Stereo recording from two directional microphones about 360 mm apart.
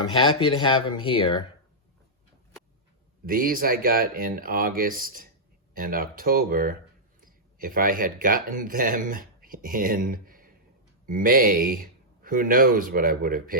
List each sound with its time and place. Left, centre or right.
0.0 s speech: centre
3.2 s speech: right